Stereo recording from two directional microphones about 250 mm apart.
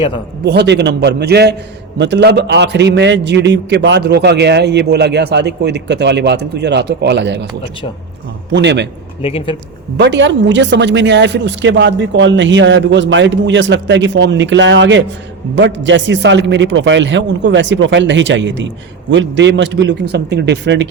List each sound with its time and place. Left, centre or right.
0.4 s a man's voice: right
8.5 s a man's voice: right
9.2 s speech: left
10.0 s a man's voice: right